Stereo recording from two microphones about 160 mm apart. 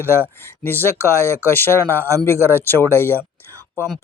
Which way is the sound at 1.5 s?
15° left (ahead or behind).